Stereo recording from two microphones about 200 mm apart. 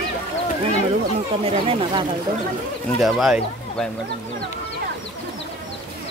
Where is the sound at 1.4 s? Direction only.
25° right (ahead or behind).